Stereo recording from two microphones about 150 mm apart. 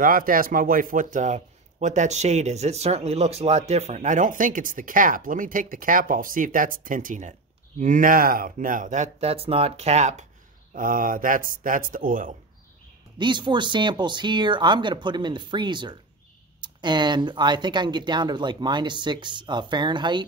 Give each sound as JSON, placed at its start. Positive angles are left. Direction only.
{"t": 0.0, "sound": "a man's voice", "side_deg": -70}
{"t": 10.7, "sound": "a man's voice", "side_deg": -65}
{"t": 13.2, "sound": "speech", "side_deg": -30}